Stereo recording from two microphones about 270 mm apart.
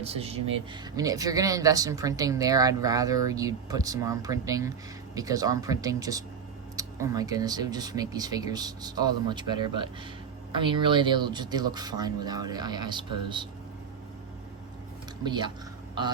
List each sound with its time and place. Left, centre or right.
0.0 s speech: right
15.2 s speech: centre